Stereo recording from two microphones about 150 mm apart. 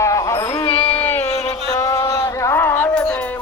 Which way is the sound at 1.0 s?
10° left (ahead or behind).